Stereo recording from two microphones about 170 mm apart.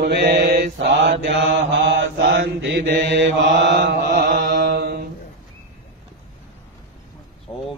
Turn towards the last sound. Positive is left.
turn(degrees=30)  # may be behind; listen again after turning